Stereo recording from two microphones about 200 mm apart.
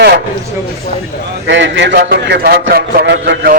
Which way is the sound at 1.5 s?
65° right (ahead or behind).